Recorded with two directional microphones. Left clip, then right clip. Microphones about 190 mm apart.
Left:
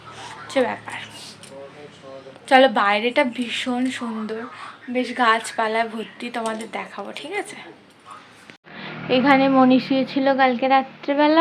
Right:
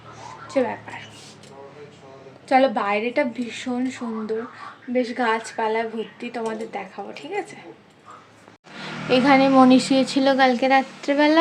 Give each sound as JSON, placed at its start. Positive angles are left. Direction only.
{"t": 0.5, "sound": "a woman's voice", "side_deg": 0}
{"t": 2.5, "sound": "a woman's voice", "side_deg": -5}
{"t": 8.8, "sound": "a woman's voice", "side_deg": -15}